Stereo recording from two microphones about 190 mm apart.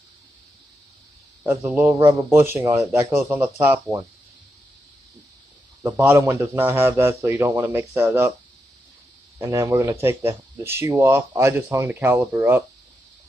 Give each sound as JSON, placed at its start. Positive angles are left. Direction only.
{"t": 1.4, "sound": "a man's voice", "side_deg": -15}
{"t": 2.0, "sound": "speech", "side_deg": -25}
{"t": 2.3, "sound": "speech", "side_deg": -10}
{"t": 5.8, "sound": "speech", "side_deg": -10}
{"t": 9.4, "sound": "speech", "side_deg": -15}